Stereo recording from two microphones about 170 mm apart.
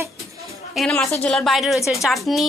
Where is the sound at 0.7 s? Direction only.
Centre (ahead or behind).